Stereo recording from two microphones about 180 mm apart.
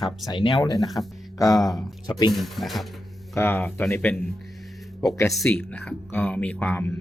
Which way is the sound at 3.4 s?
10° left (ahead or behind).